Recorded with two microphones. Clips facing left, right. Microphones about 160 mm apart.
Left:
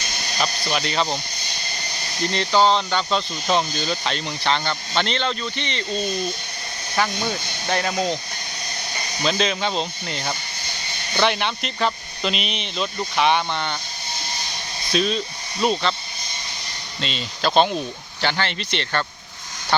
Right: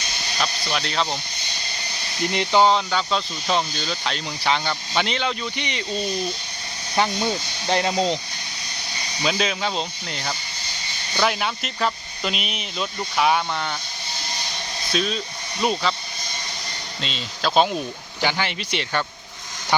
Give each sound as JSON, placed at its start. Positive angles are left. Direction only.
{"t": 0.3, "sound": "speech", "side_deg": 5}
{"t": 2.2, "sound": "speech", "side_deg": -15}
{"t": 2.7, "sound": "speech", "side_deg": 0}
{"t": 6.9, "sound": "speech", "side_deg": -20}
{"t": 9.2, "sound": "speech", "side_deg": -5}
{"t": 14.9, "sound": "speech", "side_deg": 0}
{"t": 17.0, "sound": "speech", "side_deg": 0}